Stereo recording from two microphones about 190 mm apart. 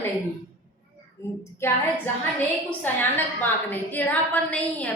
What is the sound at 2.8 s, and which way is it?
A woman's voice, 10° left (ahead or behind).